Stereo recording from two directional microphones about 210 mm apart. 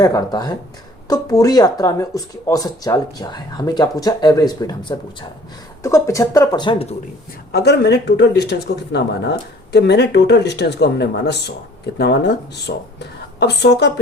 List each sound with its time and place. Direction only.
0.0 s speech: 20° left (ahead or behind)
7.5 s speech: 50° left (ahead or behind)